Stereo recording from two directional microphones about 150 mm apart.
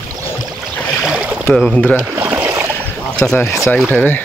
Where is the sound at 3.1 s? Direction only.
5° left (ahead or behind).